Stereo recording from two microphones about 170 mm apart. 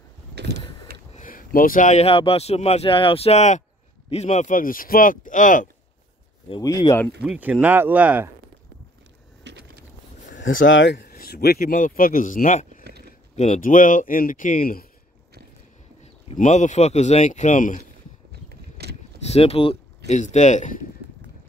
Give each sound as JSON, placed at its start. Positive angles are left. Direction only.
{"t": 0.3, "sound": "vehicle", "side_deg": -80}
{"t": 1.1, "sound": "speech", "side_deg": 55}
{"t": 6.6, "sound": "speech", "side_deg": 20}
{"t": 7.2, "sound": "speech", "side_deg": -10}
{"t": 9.4, "sound": "a sound", "side_deg": -90}
{"t": 10.4, "sound": "speech", "side_deg": 90}
{"t": 11.1, "sound": "speech", "side_deg": 60}
{"t": 16.0, "sound": "speech", "side_deg": 40}
{"t": 18.5, "sound": "vehicle", "side_deg": -70}
{"t": 19.2, "sound": "speech", "side_deg": 35}